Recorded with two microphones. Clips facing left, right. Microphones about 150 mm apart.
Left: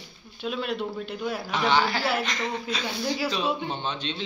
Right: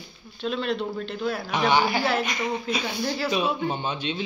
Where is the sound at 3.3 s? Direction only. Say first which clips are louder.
Right 3 dB; 10° right (ahead or behind).